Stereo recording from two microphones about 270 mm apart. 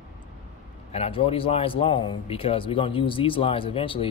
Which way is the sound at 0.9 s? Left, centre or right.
Left.